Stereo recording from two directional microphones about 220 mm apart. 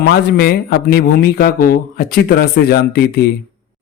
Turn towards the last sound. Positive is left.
turn(degrees=45)  # may be behind; listen again after turning